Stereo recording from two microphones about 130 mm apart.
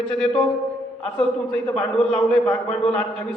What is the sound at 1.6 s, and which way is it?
A man's voice, 5° left (ahead or behind).